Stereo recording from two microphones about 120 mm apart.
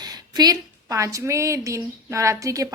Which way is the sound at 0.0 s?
35° right (ahead or behind).